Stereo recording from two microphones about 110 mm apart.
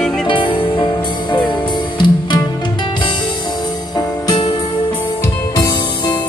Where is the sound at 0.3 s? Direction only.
50° left (ahead or behind).